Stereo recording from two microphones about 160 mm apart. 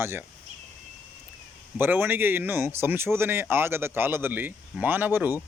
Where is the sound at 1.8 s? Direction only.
15° right (ahead or behind).